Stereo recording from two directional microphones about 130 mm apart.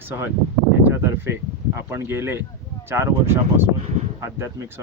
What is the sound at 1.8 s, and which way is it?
Speech, 20° right (ahead or behind).